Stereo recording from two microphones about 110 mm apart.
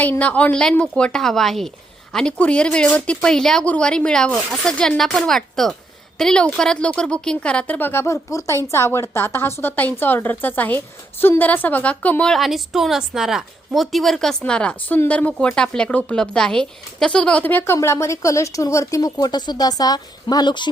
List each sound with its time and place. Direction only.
0.0 s a woman's voice: 15° left (ahead or behind); by 20.7 s 40° left (ahead or behind)